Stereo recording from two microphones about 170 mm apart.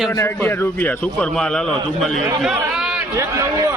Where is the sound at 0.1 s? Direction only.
15° left (ahead or behind); by 3.0 s 5° right (ahead or behind).